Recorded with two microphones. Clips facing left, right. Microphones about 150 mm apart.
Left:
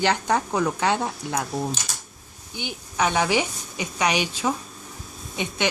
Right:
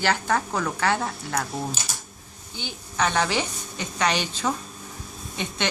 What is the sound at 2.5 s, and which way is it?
A woman's voice, 15° left (ahead or behind).